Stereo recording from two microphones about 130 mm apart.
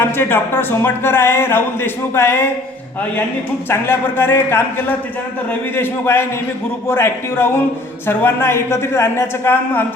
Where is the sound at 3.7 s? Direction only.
20° left (ahead or behind).